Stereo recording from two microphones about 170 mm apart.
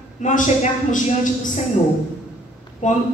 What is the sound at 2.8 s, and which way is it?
Speech, 50° left (ahead or behind).